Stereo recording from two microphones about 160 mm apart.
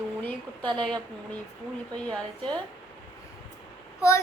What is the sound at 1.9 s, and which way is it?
Speech, 5° left (ahead or behind).